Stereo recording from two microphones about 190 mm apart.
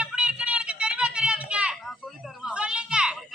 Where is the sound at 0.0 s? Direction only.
5° right (ahead or behind).